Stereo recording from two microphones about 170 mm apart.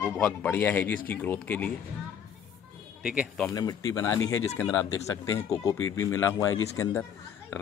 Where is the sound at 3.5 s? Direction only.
20° left (ahead or behind).